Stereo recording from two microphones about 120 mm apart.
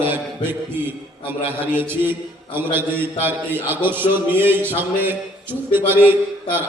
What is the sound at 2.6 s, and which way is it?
A man's voice, 20° right (ahead or behind).